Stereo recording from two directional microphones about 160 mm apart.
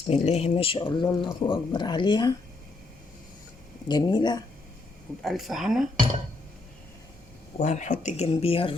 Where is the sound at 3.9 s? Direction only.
25° left (ahead or behind).